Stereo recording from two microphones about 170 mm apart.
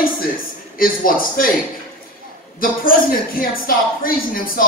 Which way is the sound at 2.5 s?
55° left (ahead or behind).